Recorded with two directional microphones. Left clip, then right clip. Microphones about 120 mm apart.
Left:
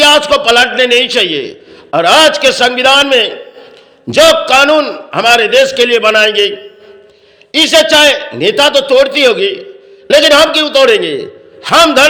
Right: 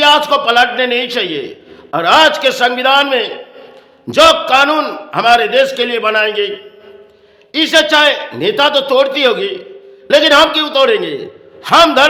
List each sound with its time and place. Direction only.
0.0 s a man's voice: 20° left (ahead or behind)
7.5 s a man's voice: 20° left (ahead or behind)